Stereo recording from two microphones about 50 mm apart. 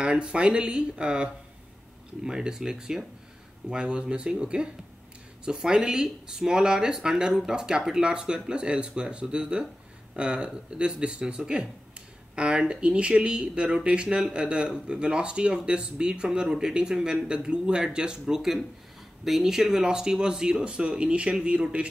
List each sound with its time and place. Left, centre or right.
0.0 s speech: centre
3.6 s speech: centre